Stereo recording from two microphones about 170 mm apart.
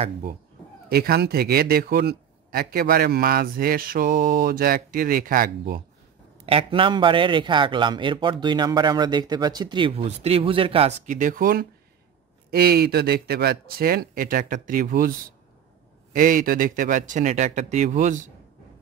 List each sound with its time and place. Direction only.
0.8 s speech: 65° right (ahead or behind)
6.4 s a man's voice: 30° right (ahead or behind)
11.1 s speech: 50° right (ahead or behind)